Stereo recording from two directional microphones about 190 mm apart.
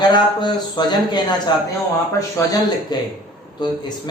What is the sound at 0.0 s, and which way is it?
A man's voice, 25° left (ahead or behind).